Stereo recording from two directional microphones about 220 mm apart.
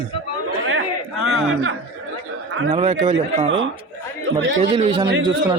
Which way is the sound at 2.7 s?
30° right (ahead or behind).